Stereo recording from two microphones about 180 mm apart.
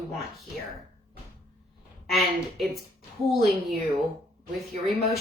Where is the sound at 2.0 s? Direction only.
Centre (ahead or behind).